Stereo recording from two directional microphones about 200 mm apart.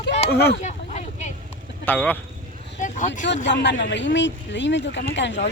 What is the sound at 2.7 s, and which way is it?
Vehicle, 40° left (ahead or behind).